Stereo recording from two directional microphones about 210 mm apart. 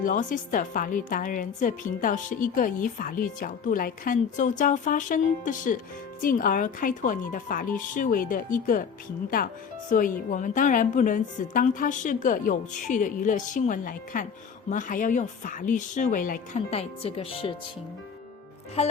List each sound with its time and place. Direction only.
0.0 s a woman's voice: 40° left (ahead or behind)
18.8 s speech: 30° left (ahead or behind)